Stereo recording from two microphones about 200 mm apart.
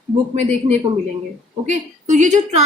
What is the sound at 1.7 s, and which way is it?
Speech, 40° right (ahead or behind).